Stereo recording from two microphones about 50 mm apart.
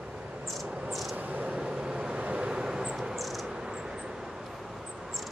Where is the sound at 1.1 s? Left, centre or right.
Right.